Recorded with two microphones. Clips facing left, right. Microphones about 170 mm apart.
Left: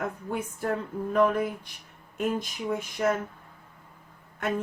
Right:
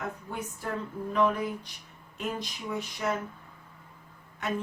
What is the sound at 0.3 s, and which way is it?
A woman's voice, 45° left (ahead or behind).